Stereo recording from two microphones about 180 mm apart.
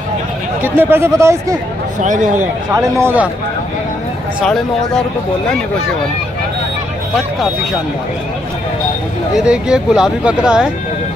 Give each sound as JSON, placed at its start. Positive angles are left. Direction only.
{"t": 0.6, "sound": "speech", "side_deg": -10}
{"t": 2.0, "sound": "a man's voice", "side_deg": -45}
{"t": 2.7, "sound": "speech", "side_deg": -15}
{"t": 4.4, "sound": "speech", "side_deg": 5}
{"t": 9.4, "sound": "speech", "side_deg": -5}